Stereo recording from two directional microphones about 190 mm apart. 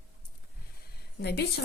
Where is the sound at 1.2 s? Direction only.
60° left (ahead or behind).